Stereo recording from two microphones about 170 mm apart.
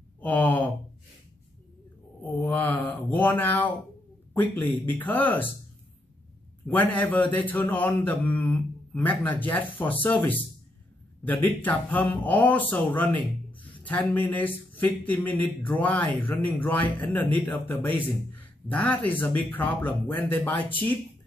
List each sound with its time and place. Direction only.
0.2 s a man's voice: 10° left (ahead or behind)
2.4 s a man's voice: 10° left (ahead or behind)
6.7 s a man's voice: 10° left (ahead or behind)